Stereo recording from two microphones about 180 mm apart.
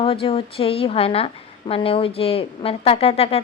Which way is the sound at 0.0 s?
30° left (ahead or behind).